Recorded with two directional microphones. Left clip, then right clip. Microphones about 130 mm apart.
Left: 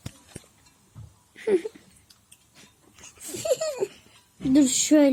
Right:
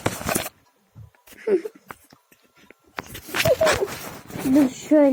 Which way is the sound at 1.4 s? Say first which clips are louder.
Right 2 dB; 35° left (ahead or behind).